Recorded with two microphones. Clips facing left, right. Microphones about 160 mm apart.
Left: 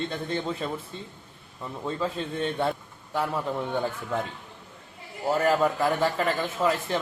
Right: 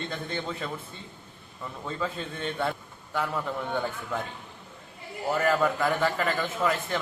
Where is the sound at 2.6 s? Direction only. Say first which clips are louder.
Left 3 dB; 30° left (ahead or behind).